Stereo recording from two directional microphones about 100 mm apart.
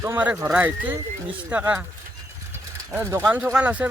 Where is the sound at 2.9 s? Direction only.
25° right (ahead or behind).